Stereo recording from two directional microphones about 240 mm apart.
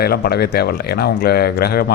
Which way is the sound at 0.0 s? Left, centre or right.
Left.